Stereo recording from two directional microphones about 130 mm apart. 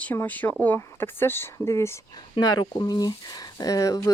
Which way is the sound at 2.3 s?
30° left (ahead or behind).